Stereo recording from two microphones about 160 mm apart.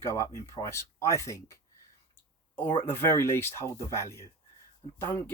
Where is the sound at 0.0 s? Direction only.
15° left (ahead or behind).